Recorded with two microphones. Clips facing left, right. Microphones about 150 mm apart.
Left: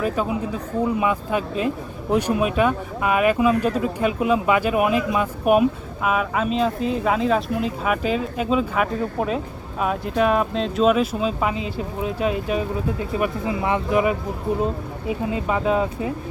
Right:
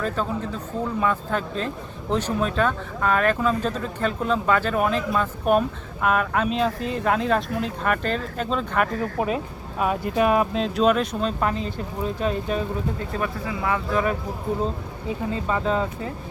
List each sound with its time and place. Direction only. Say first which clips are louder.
0.0 s speech: left 3 dB; 10° left (ahead or behind)
13.1 s speech: left 7 dB; 20° left (ahead or behind)
15.3 s speech: left 2 dB; 10° left (ahead or behind)